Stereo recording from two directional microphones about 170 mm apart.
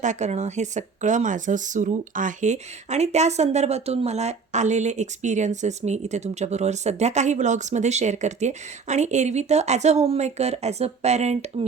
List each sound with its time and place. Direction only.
0.0 s speech: 45° right (ahead or behind)